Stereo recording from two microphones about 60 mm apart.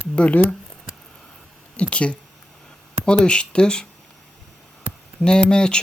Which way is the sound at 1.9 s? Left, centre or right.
Centre.